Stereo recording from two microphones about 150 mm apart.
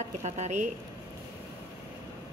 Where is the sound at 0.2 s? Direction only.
50° right (ahead or behind).